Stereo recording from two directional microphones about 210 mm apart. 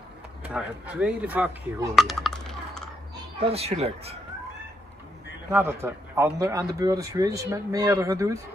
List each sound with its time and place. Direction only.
0.4 s speech: 5° right (ahead or behind)
3.3 s speech: 30° right (ahead or behind)
5.5 s speech: 10° right (ahead or behind)